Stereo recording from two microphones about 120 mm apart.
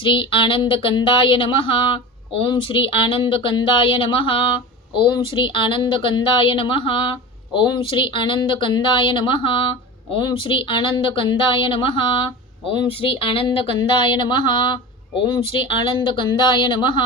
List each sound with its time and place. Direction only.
0.0 s speech: 45° left (ahead or behind)